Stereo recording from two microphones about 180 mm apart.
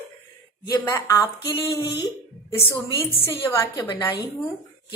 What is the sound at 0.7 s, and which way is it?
Speech, 20° left (ahead or behind).